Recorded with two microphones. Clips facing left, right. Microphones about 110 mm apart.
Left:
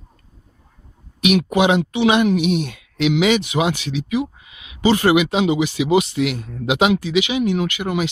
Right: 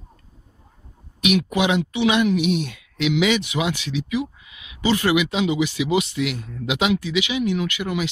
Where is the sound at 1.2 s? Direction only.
55° left (ahead or behind).